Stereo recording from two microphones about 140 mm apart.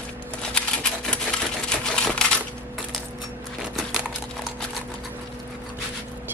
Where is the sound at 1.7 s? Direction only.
5° left (ahead or behind).